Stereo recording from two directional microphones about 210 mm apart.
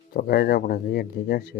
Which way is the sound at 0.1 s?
45° left (ahead or behind).